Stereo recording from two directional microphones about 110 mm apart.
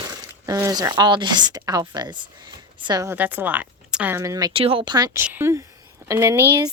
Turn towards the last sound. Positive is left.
turn(degrees=-20)  # may be behind; listen again after turning